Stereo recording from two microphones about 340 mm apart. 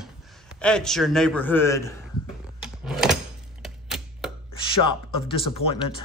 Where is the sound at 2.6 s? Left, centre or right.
Centre.